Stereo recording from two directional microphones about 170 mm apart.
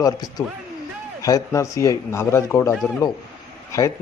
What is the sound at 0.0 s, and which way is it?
A man's voice, 25° left (ahead or behind).